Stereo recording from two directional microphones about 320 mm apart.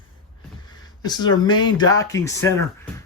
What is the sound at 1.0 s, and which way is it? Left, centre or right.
Speech, centre.